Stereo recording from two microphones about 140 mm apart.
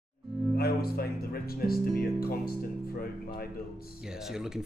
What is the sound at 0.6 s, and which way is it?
Speech, 90° left.